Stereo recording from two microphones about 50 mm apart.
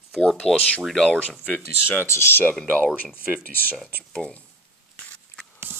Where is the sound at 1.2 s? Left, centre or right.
Left.